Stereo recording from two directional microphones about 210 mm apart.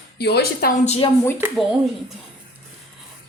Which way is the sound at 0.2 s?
50° left (ahead or behind).